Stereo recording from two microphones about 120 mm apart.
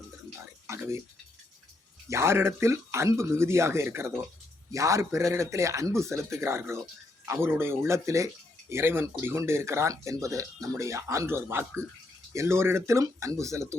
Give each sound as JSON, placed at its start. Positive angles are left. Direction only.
{"t": 0.7, "sound": "speech", "side_deg": -20}
{"t": 2.0, "sound": "speech", "side_deg": -20}